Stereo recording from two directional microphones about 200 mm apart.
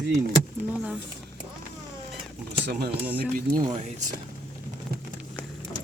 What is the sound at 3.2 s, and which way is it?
Speech, 45° right (ahead or behind).